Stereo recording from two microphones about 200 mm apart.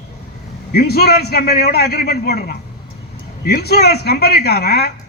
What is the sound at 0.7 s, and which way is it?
A man's voice, 50° left (ahead or behind).